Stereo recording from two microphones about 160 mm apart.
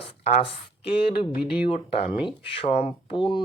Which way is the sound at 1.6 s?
40° left (ahead or behind).